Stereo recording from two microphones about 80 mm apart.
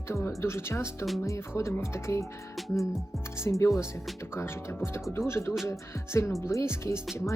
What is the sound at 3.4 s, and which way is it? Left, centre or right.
Speech, left.